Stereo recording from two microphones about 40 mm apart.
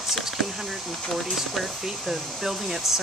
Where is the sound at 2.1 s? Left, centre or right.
Centre.